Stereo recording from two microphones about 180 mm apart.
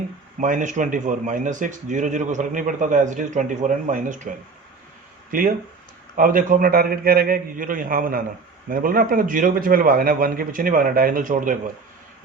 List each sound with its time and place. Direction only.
0.3 s a man's voice: 45° right (ahead or behind)